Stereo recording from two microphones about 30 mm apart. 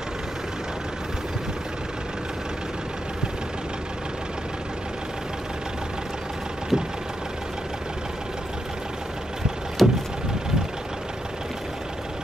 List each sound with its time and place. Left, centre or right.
6.7 s vehicle: centre
9.8 s vehicle: centre